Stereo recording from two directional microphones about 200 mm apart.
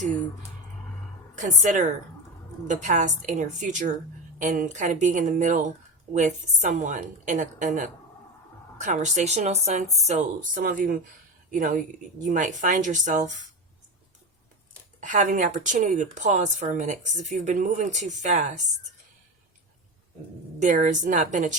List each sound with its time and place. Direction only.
1.4 s speech: 40° right (ahead or behind)
15.0 s speech: 40° right (ahead or behind)
20.6 s speech: 40° right (ahead or behind)